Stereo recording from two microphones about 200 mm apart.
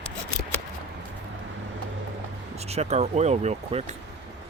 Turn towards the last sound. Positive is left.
turn(degrees=-35)  # may be behind; listen again after turning